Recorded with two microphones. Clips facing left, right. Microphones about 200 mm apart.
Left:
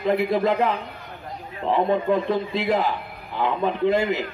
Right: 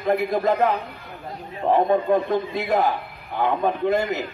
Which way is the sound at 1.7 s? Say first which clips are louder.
Right 2 dB; 50° right (ahead or behind).